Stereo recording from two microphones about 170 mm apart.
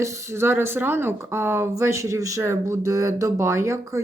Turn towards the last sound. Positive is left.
turn(degrees=-15)  # may be behind; listen again after turning